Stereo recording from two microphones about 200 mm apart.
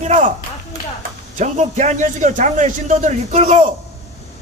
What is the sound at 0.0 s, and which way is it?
Speech, 35° right (ahead or behind).